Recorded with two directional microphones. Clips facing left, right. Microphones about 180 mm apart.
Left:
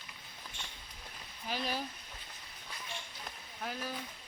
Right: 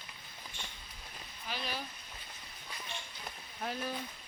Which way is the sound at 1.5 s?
45° left (ahead or behind).